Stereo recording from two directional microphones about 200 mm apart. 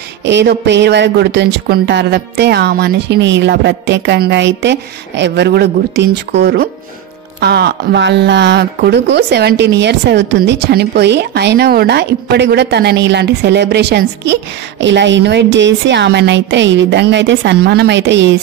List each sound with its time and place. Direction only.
0.2 s speech: 60° right (ahead or behind)